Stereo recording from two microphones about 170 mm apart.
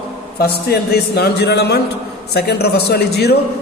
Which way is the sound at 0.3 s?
70° left (ahead or behind).